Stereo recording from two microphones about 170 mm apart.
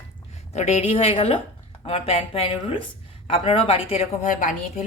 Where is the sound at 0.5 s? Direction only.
40° left (ahead or behind).